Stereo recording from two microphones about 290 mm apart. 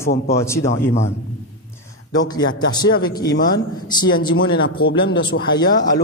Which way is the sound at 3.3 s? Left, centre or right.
Left.